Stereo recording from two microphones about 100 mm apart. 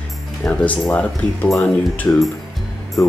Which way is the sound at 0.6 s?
10° left (ahead or behind).